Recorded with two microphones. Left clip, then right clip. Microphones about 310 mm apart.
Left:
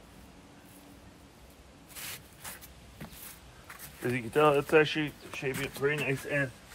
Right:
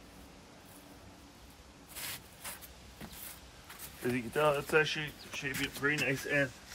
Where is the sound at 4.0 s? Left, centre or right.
Centre.